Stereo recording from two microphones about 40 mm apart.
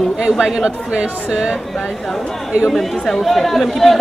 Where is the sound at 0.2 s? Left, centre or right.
Centre.